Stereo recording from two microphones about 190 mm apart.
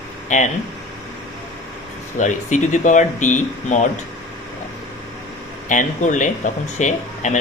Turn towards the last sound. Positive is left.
turn(degrees=40)  # may be behind; listen again after turning